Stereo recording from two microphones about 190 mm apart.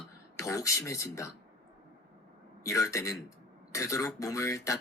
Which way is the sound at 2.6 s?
15° left (ahead or behind).